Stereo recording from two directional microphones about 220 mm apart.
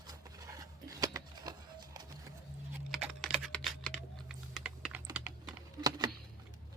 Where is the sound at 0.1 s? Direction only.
15° right (ahead or behind).